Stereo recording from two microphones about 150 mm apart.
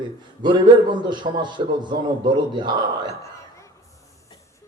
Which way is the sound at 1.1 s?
30° right (ahead or behind).